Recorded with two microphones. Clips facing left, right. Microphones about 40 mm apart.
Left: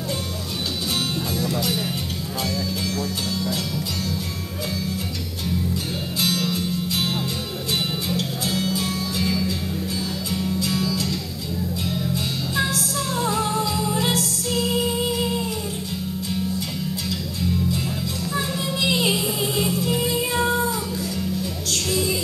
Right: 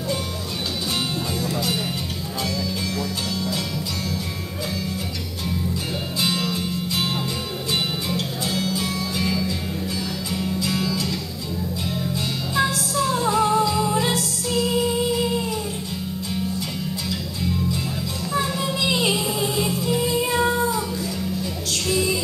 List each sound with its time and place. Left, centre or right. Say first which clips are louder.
6.2 s music: left 1 dB; centre
8.2 s music: even; centre
12.9 s music: right 6 dB; centre
18.3 s music: right 4 dB; centre
21.8 s music: right 2 dB; centre